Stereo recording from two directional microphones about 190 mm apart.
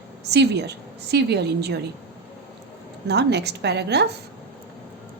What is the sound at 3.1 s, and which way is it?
A woman's voice, 60° right (ahead or behind).